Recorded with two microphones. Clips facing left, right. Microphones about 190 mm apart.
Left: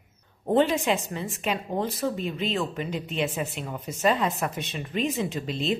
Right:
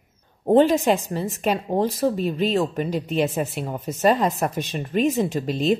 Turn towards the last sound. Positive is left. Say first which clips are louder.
# right 6 dB
turn(degrees=-40)  # may be behind; listen again after turning